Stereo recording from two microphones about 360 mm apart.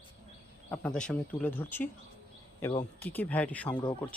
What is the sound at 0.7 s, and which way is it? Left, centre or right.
Speech, centre.